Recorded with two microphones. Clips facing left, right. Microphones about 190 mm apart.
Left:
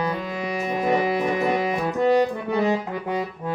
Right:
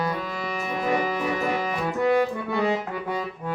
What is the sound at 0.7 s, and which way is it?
Music, 20° left (ahead or behind).